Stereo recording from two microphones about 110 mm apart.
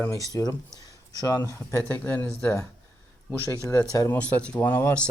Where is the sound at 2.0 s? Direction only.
20° left (ahead or behind).